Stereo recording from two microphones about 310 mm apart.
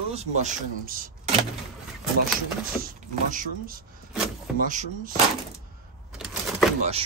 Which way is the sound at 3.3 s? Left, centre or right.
Right.